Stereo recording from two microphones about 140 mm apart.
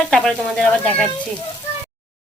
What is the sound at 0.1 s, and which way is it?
Speech, 5° left (ahead or behind).